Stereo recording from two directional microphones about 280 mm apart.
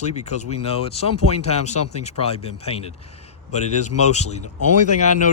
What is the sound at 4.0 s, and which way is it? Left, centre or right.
Speech, left.